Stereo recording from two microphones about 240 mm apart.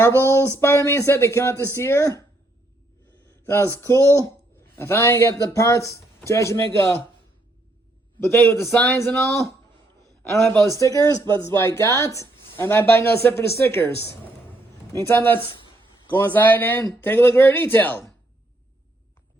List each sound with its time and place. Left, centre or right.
0.2 s a man's voice: centre
3.8 s a man's voice: centre
8.2 s a man's voice: centre
10.8 s a man's voice: centre